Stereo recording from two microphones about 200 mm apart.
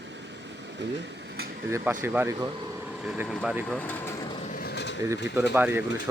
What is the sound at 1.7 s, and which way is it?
Speech, 10° right (ahead or behind).